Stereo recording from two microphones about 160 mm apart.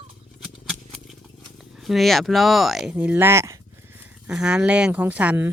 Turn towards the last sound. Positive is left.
turn(degrees=-10)  # may be behind; listen again after turning